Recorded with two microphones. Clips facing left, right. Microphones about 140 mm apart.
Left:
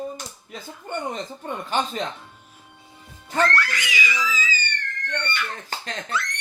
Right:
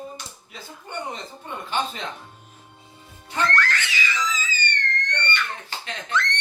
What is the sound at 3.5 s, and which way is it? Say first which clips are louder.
Laughter: right 1 dB; 10° left (ahead or behind).